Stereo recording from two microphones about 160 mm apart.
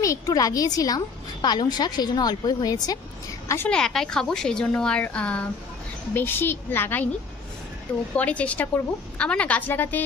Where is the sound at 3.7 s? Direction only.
5° left (ahead or behind).